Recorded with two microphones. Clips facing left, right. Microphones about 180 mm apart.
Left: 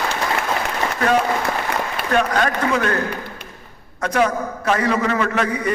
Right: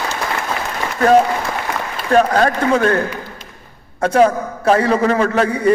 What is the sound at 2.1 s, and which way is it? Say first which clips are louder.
Speech: right 6 dB; 35° right (ahead or behind).